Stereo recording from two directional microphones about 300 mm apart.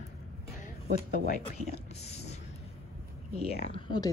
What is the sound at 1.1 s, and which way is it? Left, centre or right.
Speech, left.